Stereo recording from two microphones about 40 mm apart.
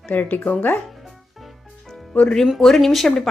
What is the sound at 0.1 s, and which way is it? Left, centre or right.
Speech, left.